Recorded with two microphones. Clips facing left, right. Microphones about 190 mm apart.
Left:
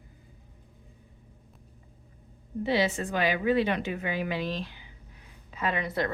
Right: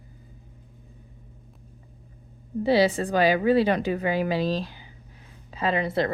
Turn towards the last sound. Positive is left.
turn(degrees=-30)  # may be behind; listen again after turning